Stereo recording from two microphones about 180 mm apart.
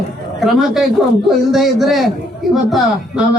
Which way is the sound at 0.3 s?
Centre (ahead or behind).